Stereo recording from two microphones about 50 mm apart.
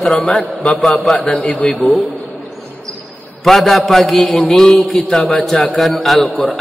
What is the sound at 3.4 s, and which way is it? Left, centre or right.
A man's voice, centre.